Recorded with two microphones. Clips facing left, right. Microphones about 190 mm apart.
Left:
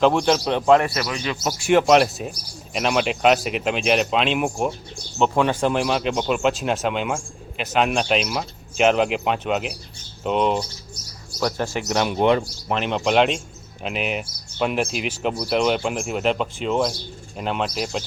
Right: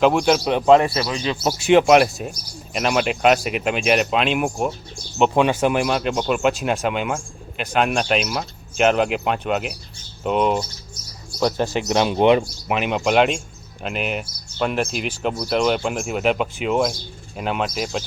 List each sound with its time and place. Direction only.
0.0 s speech: 5° right (ahead or behind)
1.9 s speech: centre (ahead or behind)
5.1 s speech: 15° right (ahead or behind)
5.5 s speech: 5° right (ahead or behind)
11.3 s speech: 20° right (ahead or behind); by 18.0 s centre (ahead or behind)